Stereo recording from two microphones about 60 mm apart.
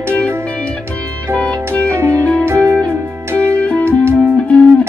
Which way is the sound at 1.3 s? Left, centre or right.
Left.